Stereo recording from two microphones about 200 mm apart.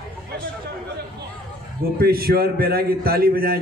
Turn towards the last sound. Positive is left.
turn(degrees=-50)  # may be behind; listen again after turning